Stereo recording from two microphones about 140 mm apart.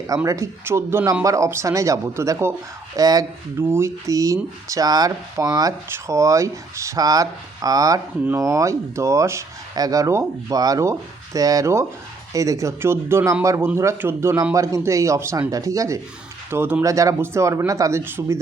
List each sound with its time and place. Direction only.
0.3 s speech: 20° right (ahead or behind)